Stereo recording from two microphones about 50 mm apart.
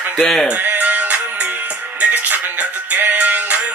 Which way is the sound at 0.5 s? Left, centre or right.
Right.